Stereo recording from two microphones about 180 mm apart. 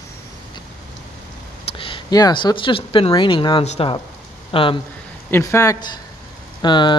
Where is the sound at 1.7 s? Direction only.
30° left (ahead or behind).